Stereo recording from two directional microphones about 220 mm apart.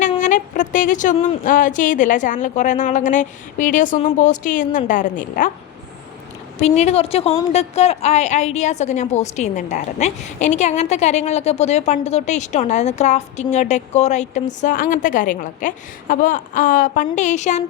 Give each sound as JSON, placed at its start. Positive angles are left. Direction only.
{"t": 0.1, "sound": "a woman's voice", "side_deg": 35}
{"t": 6.6, "sound": "a woman's voice", "side_deg": 30}